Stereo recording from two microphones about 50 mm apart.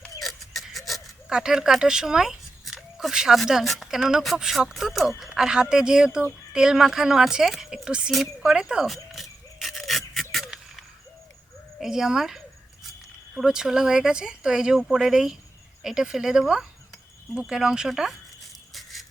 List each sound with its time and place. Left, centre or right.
0.2 s a sound: centre
1.3 s speech: centre
1.8 s a sound: centre
3.1 s speech: centre
3.6 s speech: centre
3.8 s speech: centre
7.9 s speech: centre
8.1 s speech: centre
8.4 s speech: centre
8.9 s a sound: centre
11.8 s speech: centre
13.4 s speech: centre
14.8 s speech: centre
18.7 s toothbrush: centre